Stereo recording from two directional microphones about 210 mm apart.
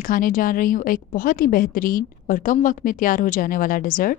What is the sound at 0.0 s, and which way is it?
A woman's voice, 40° left (ahead or behind).